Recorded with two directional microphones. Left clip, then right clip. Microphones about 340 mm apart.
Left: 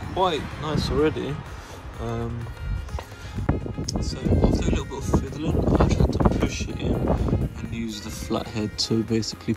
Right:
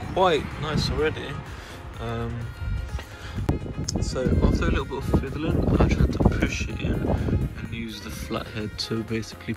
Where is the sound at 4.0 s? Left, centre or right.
Centre.